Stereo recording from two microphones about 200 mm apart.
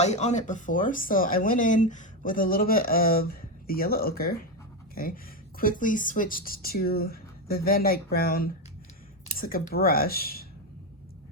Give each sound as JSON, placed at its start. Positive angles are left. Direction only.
{"t": 0.0, "sound": "speech", "side_deg": 35}